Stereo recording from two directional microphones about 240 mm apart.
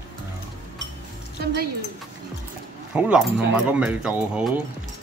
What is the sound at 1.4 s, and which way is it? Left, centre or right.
Speech, right.